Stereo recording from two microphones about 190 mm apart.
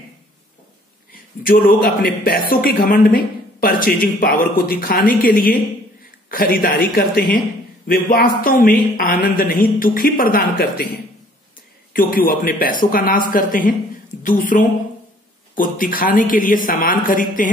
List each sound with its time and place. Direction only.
1.1 s a man's voice: 50° left (ahead or behind)
11.9 s a man's voice: 50° left (ahead or behind)